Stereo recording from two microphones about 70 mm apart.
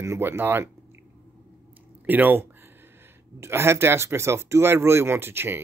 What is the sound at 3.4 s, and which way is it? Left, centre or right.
Speech, right.